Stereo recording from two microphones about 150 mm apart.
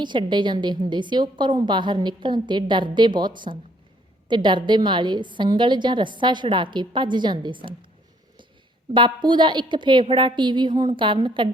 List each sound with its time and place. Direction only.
0.0 s a woman's voice: 30° right (ahead or behind)
8.9 s a woman's voice: 30° right (ahead or behind)